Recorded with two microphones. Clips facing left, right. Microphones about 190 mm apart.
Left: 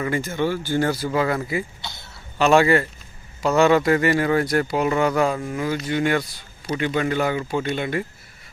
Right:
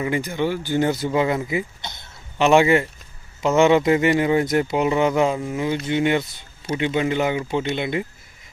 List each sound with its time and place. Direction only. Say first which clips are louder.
0.0 s speech: even; 15° right (ahead or behind)